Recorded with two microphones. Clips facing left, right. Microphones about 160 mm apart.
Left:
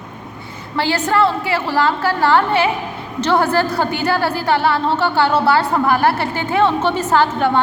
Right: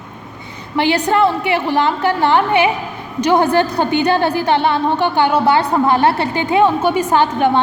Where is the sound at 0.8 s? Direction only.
15° right (ahead or behind).